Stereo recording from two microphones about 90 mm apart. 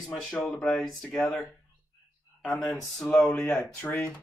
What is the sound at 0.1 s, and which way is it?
Speech, 5° left (ahead or behind).